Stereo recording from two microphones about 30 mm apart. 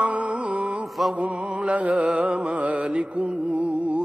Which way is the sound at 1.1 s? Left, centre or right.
Right.